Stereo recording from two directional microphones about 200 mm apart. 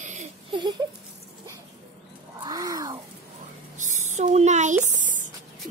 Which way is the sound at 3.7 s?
35° right (ahead or behind).